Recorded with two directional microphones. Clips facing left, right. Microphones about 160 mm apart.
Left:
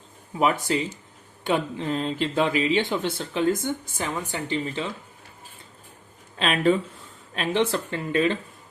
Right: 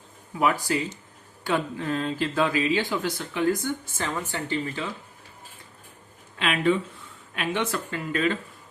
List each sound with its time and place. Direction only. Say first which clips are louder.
0.3 s speech: left 1 dB; 25° left (ahead or behind)
6.4 s speech: left 2 dB; 35° left (ahead or behind)